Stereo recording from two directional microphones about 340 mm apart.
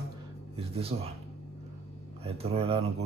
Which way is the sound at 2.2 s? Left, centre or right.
Centre.